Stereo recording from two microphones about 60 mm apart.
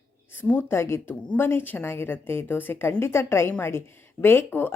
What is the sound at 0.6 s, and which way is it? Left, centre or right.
Speech, left.